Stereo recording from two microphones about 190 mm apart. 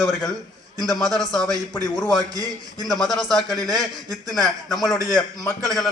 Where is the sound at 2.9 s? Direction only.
Centre (ahead or behind).